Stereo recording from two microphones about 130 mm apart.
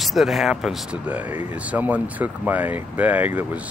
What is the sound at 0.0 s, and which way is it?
Speech, centre (ahead or behind).